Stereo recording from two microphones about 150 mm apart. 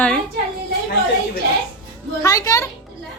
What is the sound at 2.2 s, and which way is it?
Speech, 25° left (ahead or behind).